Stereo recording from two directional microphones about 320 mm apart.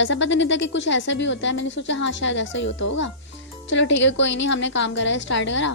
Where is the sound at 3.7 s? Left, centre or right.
Left.